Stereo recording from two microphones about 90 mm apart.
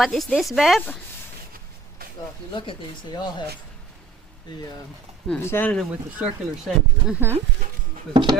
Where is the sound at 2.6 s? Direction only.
60° left (ahead or behind).